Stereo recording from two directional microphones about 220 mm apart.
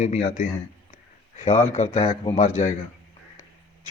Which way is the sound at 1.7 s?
30° left (ahead or behind).